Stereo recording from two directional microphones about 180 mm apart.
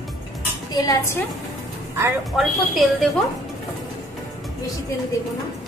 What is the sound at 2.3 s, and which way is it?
Speech, centre (ahead or behind).